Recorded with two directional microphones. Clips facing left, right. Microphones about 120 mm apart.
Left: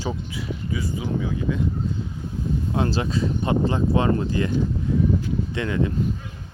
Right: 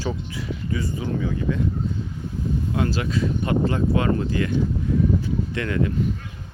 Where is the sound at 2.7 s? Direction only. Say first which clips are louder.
Left 1 dB; 30° left (ahead or behind).